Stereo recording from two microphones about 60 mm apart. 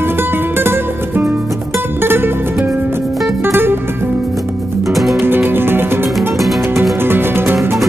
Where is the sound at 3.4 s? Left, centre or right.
Right.